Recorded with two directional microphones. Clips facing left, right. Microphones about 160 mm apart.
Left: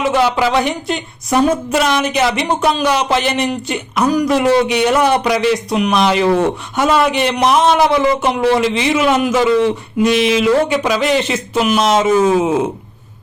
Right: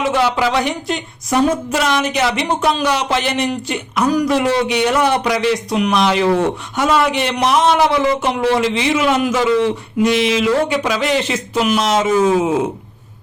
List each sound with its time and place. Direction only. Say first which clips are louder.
0.5 s a man's voice: left 2 dB; 20° left (ahead or behind)